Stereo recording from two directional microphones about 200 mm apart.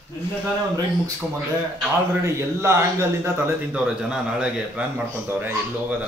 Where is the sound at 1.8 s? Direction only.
15° right (ahead or behind).